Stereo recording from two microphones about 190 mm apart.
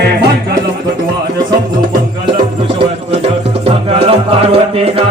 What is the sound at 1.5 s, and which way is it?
Music, 25° right (ahead or behind).